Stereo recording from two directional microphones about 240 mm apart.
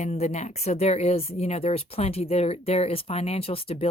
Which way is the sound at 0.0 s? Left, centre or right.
Left.